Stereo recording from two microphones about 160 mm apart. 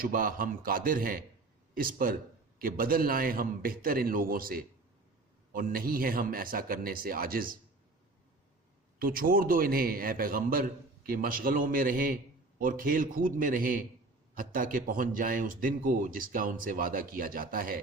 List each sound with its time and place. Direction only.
0.0 s a man's voice: 65° right (ahead or behind)
9.0 s a man's voice: 65° right (ahead or behind)